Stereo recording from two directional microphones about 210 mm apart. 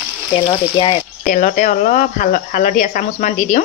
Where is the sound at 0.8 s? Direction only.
20° left (ahead or behind).